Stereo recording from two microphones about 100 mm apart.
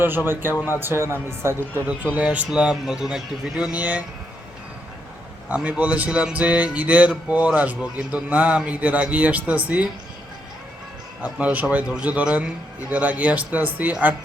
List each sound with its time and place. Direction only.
0.3 s speech: 20° right (ahead or behind)
1.9 s speech: 15° right (ahead or behind)
5.5 s speech: 15° right (ahead or behind)
11.2 s speech: 15° right (ahead or behind)